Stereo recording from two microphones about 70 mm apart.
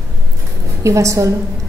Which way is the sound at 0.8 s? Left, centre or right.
Right.